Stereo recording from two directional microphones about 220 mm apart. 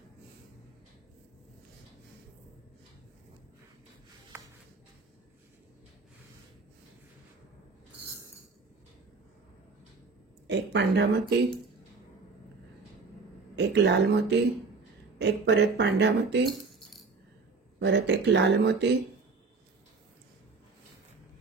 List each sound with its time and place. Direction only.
4.3 s a sound: 10° right (ahead or behind)
10.4 s speech: 50° right (ahead or behind)
13.6 s speech: 50° right (ahead or behind)
17.7 s speech: 50° right (ahead or behind)